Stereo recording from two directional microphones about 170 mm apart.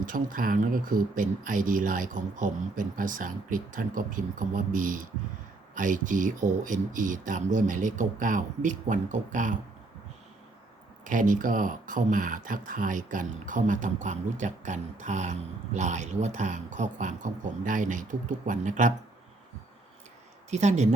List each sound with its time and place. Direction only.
0.0 s speech: 55° right (ahead or behind)
11.0 s speech: 50° right (ahead or behind)
20.5 s speech: 45° right (ahead or behind)